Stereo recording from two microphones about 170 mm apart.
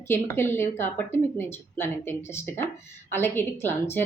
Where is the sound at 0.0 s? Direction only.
15° left (ahead or behind).